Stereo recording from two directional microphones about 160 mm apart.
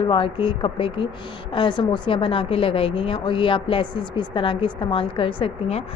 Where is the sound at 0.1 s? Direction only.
30° left (ahead or behind).